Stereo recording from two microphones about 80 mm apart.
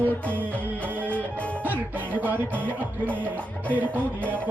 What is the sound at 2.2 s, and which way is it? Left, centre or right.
Music, right.